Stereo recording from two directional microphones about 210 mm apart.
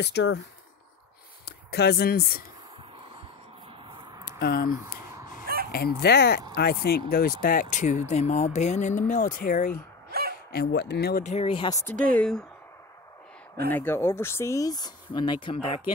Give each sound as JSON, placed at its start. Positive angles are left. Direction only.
{"t": 0.0, "sound": "speech", "side_deg": 55}
{"t": 1.7, "sound": "speech", "side_deg": 50}
{"t": 4.2, "sound": "a sound", "side_deg": 45}
{"t": 5.7, "sound": "speech", "side_deg": 50}
{"t": 11.2, "sound": "speech", "side_deg": 25}
{"t": 12.2, "sound": "speech", "side_deg": 5}
{"t": 13.7, "sound": "speech", "side_deg": 10}